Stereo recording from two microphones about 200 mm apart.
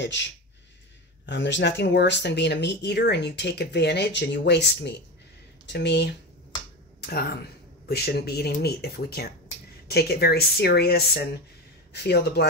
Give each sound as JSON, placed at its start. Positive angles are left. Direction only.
{"t": 0.0, "sound": "speech", "side_deg": 65}